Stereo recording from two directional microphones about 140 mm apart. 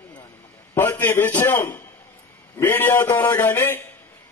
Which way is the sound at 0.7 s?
15° left (ahead or behind).